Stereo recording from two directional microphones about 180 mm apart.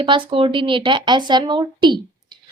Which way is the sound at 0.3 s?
30° right (ahead or behind).